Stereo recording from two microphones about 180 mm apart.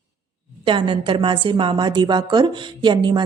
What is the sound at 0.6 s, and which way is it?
A woman's voice, 25° right (ahead or behind).